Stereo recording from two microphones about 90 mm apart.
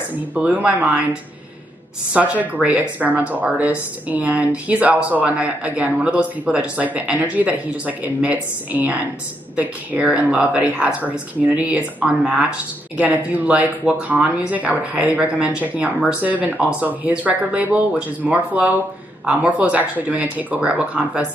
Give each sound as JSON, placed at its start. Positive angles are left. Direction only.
{"t": 0.3, "sound": "speech", "side_deg": -15}
{"t": 2.1, "sound": "speech", "side_deg": -15}